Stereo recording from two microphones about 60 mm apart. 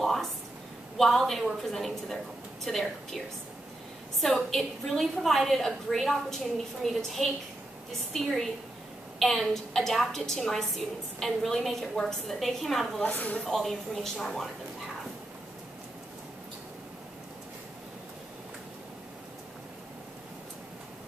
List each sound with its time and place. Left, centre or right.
0.0 s a sound: centre
0.9 s a woman's voice: centre
4.2 s a woman's voice: centre
13.0 s speech: left
13.4 s a woman's voice: centre